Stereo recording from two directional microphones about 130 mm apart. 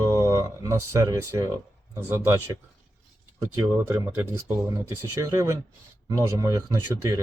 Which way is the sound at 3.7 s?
15° right (ahead or behind).